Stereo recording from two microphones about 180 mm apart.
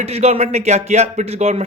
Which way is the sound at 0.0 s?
35° right (ahead or behind).